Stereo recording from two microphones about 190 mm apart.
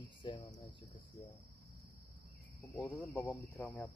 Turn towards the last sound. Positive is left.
turn(degrees=10)  # may be behind; listen again after turning